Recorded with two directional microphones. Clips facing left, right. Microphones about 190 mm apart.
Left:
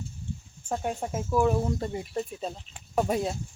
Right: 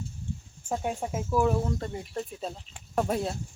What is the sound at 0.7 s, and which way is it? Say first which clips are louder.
Speech: even; centre (ahead or behind).